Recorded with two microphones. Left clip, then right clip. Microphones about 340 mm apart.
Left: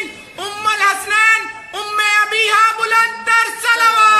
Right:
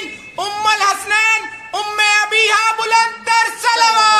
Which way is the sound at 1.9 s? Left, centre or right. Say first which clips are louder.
Even; centre.